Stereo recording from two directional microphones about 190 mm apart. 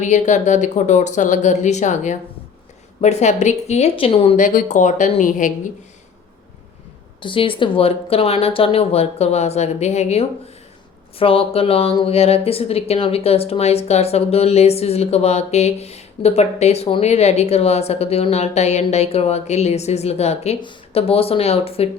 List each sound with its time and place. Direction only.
0.0 s speech: 40° left (ahead or behind)
4.4 s speech: 45° left (ahead or behind)
7.2 s speech: 25° left (ahead or behind)